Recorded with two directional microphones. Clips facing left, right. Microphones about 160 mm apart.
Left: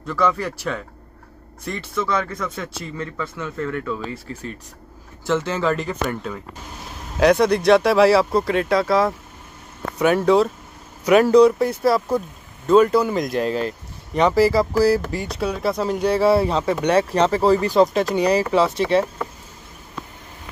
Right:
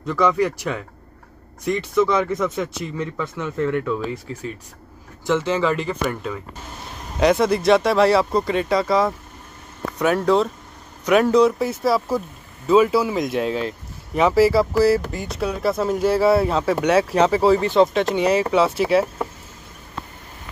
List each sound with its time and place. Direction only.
0.0 s speech: 15° right (ahead or behind)
5.9 s speech: centre (ahead or behind)